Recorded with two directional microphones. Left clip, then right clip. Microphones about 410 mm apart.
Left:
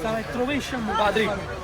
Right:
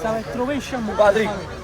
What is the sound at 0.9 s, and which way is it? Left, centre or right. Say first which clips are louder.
Speech: right 6 dB; right.